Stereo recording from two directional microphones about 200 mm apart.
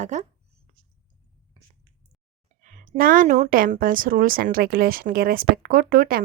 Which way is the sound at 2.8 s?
45° right (ahead or behind).